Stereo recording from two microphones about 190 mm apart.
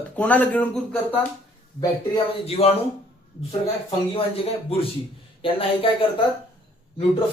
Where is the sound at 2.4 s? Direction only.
30° left (ahead or behind).